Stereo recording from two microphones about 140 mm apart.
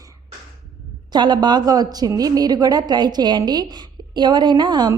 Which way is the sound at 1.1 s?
30° right (ahead or behind).